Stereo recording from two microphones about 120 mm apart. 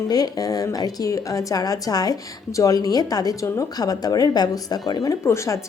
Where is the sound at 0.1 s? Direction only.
30° left (ahead or behind).